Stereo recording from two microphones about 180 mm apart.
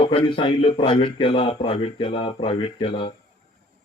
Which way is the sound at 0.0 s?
30° left (ahead or behind).